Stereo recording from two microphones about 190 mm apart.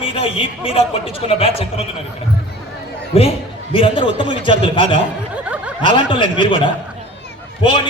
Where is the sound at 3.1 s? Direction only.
30° left (ahead or behind).